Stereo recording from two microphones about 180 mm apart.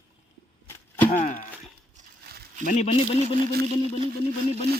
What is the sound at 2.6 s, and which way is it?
Speech, 40° left (ahead or behind).